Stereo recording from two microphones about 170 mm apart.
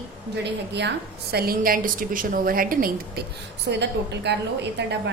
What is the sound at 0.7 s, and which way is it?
A woman's voice, 85° right.